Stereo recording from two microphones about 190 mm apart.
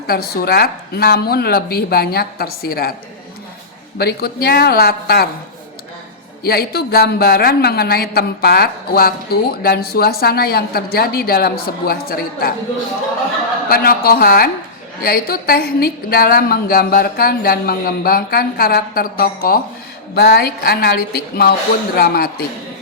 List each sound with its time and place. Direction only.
0.1 s a man's voice: 55° left (ahead or behind)
3.9 s a man's voice: 55° left (ahead or behind)
6.4 s a man's voice: 55° left (ahead or behind)
13.7 s a woman's voice: 50° left (ahead or behind)